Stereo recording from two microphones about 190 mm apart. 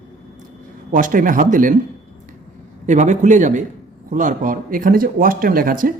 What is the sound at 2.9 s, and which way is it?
A man's voice, 40° right (ahead or behind).